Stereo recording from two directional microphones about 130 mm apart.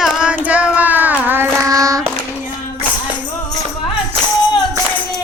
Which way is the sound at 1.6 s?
25° right (ahead or behind).